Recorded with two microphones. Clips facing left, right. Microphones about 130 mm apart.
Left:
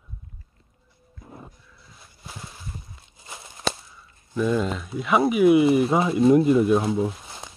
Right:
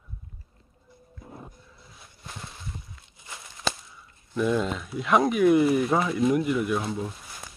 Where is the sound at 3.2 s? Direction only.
25° left (ahead or behind).